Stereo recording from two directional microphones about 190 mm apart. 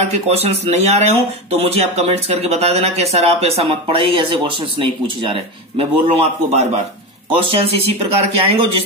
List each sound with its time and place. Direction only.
0.1 s speech: 35° right (ahead or behind)